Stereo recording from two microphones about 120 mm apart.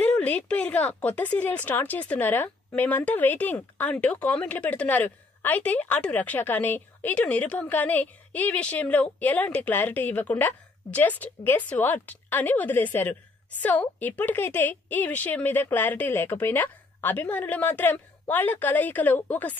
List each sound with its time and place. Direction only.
0.0 s speech: 10° left (ahead or behind)